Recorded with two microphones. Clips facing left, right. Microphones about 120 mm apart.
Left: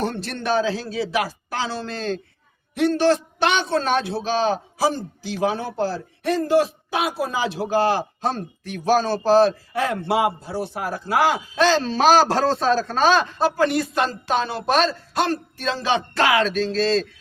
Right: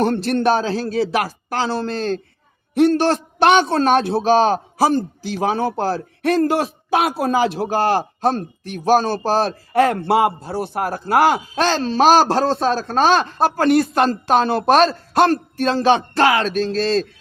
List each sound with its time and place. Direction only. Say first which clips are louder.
0.0 s a man's voice: right 9 dB; 55° right (ahead or behind)
5.3 s a man's voice: right 4 dB; 55° right (ahead or behind)